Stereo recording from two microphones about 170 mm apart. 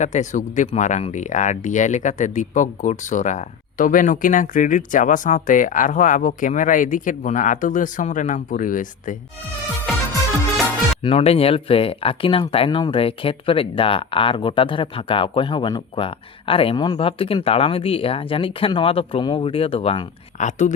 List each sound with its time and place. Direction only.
0.0 s speech: 45° left (ahead or behind)
11.0 s speech: 35° left (ahead or behind)